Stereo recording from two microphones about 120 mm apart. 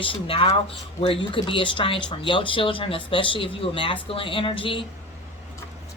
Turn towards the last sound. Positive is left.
turn(degrees=45)  # may be behind; listen again after turning